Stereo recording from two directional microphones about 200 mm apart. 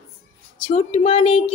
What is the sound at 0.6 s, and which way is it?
Speech, 30° left (ahead or behind).